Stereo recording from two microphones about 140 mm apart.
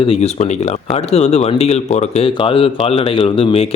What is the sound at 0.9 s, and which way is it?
Speech, 45° left (ahead or behind).